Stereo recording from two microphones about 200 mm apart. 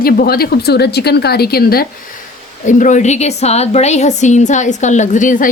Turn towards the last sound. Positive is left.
turn(degrees=40)  # may be behind; listen again after turning